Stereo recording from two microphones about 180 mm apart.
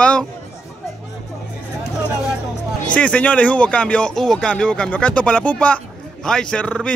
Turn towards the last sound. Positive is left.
turn(degrees=5)  # may be behind; listen again after turning